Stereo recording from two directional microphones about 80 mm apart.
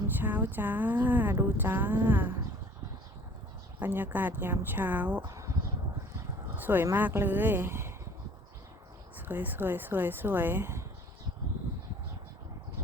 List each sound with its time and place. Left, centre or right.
0.2 s speech: right
3.8 s speech: right
5.2 s a sound: right
6.6 s a sound: right
6.9 s speech: right
9.1 s speech: right